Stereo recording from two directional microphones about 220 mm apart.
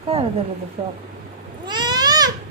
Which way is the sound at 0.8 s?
25° right (ahead or behind).